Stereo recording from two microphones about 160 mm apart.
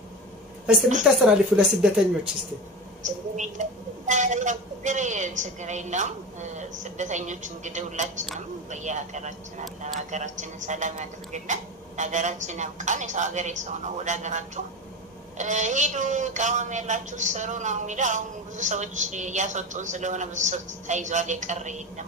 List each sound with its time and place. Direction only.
1.1 s a woman's voice: 5° right (ahead or behind)
3.3 s speech: 50° right (ahead or behind)